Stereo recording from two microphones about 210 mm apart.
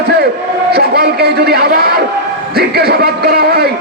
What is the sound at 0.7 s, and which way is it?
A man's voice, 50° right (ahead or behind).